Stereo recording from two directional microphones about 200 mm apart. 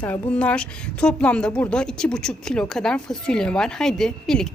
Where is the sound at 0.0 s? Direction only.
5° left (ahead or behind).